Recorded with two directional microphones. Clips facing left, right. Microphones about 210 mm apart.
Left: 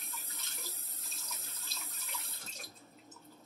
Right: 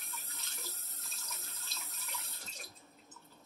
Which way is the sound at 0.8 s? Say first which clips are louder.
Left 1 dB; centre (ahead or behind).